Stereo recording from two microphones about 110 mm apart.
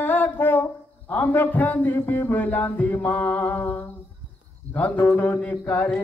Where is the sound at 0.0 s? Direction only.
20° left (ahead or behind).